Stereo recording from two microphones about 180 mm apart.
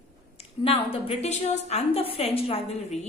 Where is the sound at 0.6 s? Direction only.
30° left (ahead or behind).